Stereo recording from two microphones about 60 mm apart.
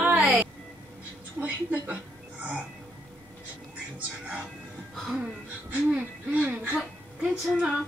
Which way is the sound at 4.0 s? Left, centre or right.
Right.